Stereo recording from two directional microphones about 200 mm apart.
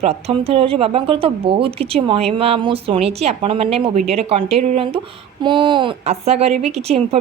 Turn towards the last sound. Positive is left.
turn(degrees=-30)  # may be behind; listen again after turning